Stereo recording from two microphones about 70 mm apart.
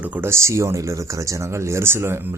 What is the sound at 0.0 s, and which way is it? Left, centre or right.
Speech, right.